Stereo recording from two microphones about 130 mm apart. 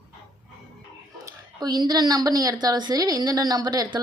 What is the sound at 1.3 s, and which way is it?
A woman's voice, 30° right (ahead or behind).